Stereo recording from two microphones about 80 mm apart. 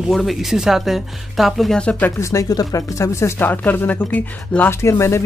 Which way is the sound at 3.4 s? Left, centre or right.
Left.